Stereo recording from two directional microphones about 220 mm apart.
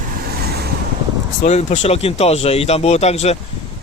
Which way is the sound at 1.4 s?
30° left (ahead or behind).